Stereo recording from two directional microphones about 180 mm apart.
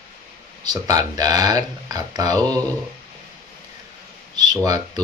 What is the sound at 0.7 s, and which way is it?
Speech, 20° right (ahead or behind).